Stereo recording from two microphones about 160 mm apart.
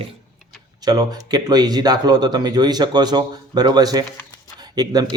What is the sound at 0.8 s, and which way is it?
Speech, 25° right (ahead or behind).